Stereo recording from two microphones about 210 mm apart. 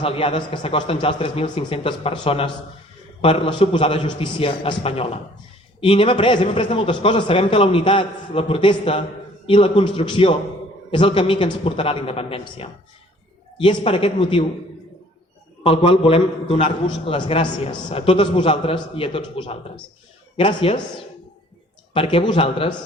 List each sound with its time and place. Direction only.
0.0 s a man's voice: 25° left (ahead or behind)
15.6 s a man's voice: 25° left (ahead or behind)
21.9 s a man's voice: 25° left (ahead or behind)